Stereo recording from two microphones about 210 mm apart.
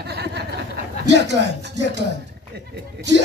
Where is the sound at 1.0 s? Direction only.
55° right (ahead or behind).